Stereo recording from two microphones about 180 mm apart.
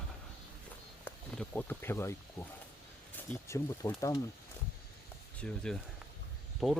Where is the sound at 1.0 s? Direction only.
10° left (ahead or behind).